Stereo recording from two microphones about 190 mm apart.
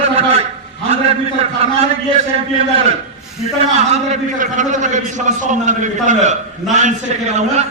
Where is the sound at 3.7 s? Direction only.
40° right (ahead or behind).